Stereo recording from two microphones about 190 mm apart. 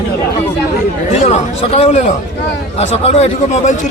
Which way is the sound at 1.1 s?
35° left (ahead or behind).